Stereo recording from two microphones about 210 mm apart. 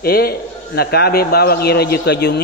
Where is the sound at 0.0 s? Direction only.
45° left (ahead or behind).